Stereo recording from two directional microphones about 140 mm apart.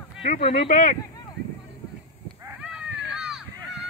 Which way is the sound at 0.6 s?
70° left (ahead or behind).